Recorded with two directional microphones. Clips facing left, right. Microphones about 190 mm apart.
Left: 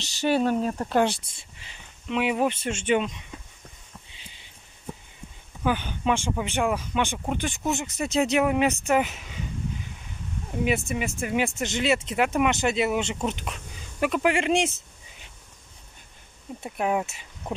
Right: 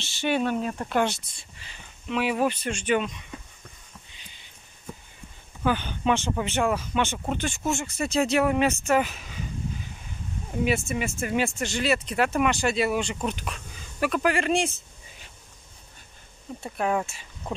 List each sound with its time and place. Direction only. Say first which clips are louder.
0.0 s speech: left 2 dB; 40° left (ahead or behind)
2.0 s speech: left 1 dB; 20° left (ahead or behind)
5.6 s speech: even; 10° left (ahead or behind)
10.6 s speech: even; 15° left (ahead or behind)
16.6 s speech: even; 10° left (ahead or behind)